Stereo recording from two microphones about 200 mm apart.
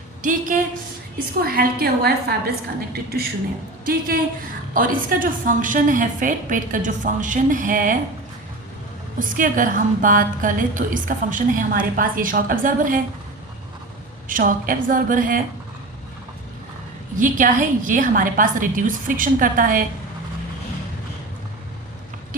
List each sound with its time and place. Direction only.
0.2 s a woman's voice: 40° right (ahead or behind)
9.1 s a woman's voice: 40° right (ahead or behind)
14.3 s a woman's voice: 45° right (ahead or behind)
17.2 s a woman's voice: 40° right (ahead or behind)